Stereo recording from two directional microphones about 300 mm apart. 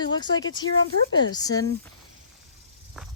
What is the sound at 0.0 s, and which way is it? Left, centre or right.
A woman's voice, centre.